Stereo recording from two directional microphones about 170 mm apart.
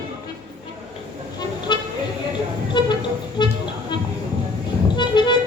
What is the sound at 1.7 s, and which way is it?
Vehicle, 25° left (ahead or behind).